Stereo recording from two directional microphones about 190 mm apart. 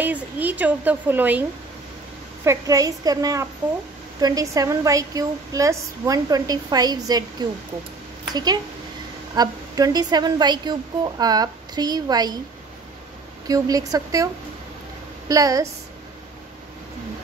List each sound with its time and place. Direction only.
0.0 s speech: 10° right (ahead or behind)
2.4 s a woman's voice: 15° right (ahead or behind)
13.5 s a woman's voice: 20° right (ahead or behind)